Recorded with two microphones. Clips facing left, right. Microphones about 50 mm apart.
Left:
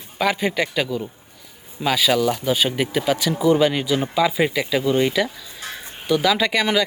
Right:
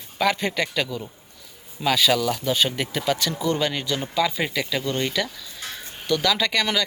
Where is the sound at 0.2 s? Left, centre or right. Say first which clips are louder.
Left 2 dB; centre.